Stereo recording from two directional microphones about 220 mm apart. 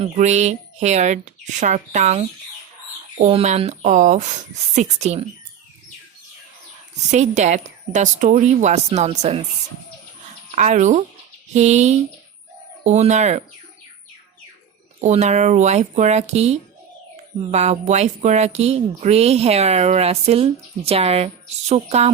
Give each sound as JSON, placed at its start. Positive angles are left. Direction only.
{"t": 0.0, "sound": "a woman's voice", "side_deg": -30}
{"t": 7.1, "sound": "a woman's voice", "side_deg": -30}
{"t": 10.5, "sound": "a woman's voice", "side_deg": -35}
{"t": 15.0, "sound": "a woman's voice", "side_deg": -30}